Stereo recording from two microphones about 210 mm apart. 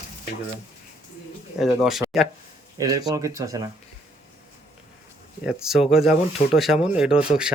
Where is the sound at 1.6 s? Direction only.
Centre (ahead or behind).